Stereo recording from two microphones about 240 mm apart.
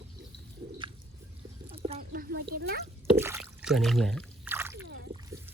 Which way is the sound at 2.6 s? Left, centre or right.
Right.